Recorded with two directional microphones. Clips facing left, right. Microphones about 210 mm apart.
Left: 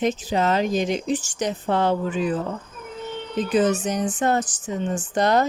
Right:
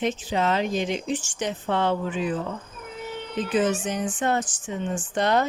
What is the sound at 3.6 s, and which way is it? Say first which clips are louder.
Speech: left 3 dB; 40° left (ahead or behind).